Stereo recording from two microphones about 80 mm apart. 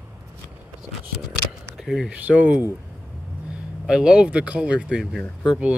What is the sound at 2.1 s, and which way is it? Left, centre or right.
Speech, centre.